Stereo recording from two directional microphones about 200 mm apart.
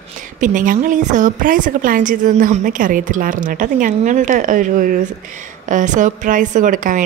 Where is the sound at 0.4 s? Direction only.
40° right (ahead or behind).